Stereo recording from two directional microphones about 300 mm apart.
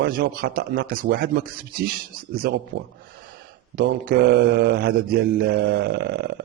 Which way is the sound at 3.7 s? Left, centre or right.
Right.